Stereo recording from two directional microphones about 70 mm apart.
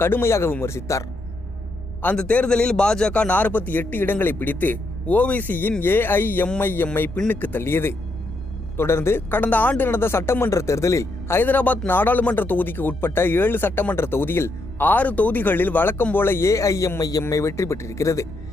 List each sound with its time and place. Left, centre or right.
0.0 s speech: left
2.1 s speech: centre; by 11.3 s left
11.3 s a man's voice: left
17.2 s a man's voice: left